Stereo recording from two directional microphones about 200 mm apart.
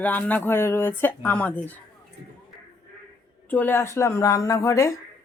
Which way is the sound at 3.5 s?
10° left (ahead or behind).